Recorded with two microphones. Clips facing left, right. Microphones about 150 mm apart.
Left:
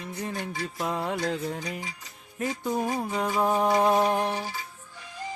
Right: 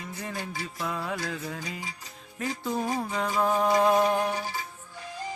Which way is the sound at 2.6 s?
15° left (ahead or behind).